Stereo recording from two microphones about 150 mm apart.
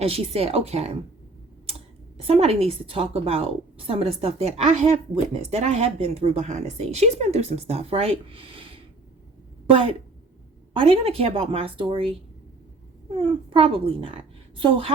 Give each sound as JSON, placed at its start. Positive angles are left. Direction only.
{"t": 0.0, "sound": "a woman's voice", "side_deg": -40}
{"t": 2.1, "sound": "a woman's voice", "side_deg": -40}